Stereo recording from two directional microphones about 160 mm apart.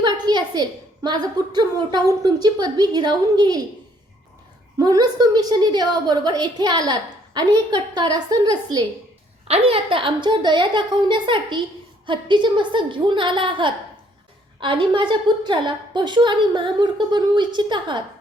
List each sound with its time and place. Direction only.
0.0 s a woman's voice: 30° right (ahead or behind)
4.8 s a woman's voice: 25° right (ahead or behind)
9.5 s a woman's voice: 35° right (ahead or behind)